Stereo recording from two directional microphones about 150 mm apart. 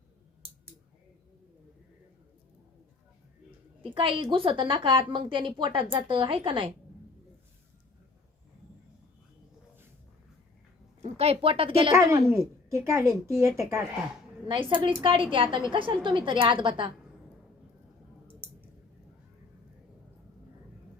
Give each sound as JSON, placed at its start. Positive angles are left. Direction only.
{"t": 3.9, "sound": "a woman's voice", "side_deg": -35}
{"t": 11.0, "sound": "speech", "side_deg": -45}
{"t": 11.9, "sound": "a woman's voice", "side_deg": -20}
{"t": 14.7, "sound": "a woman's voice", "side_deg": -35}